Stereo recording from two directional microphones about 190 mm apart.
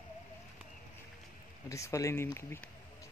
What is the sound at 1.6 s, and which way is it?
Speech, 15° left (ahead or behind).